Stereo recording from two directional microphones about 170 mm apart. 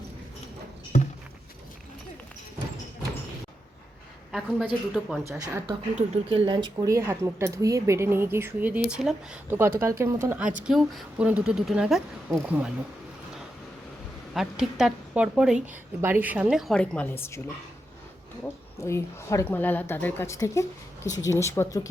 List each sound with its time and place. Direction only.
0.9 s a sound: 50° left (ahead or behind)
4.3 s a woman's voice: centre (ahead or behind)
5.4 s speech: 20° right (ahead or behind)
6.0 s speech: 35° right (ahead or behind)
6.9 s a woman's voice: 15° right (ahead or behind)
14.3 s speech: centre (ahead or behind)
18.4 s a woman's voice: 15° left (ahead or behind)